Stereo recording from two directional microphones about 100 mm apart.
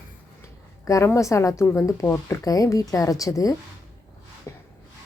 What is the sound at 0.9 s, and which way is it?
A woman's voice, 30° left (ahead or behind).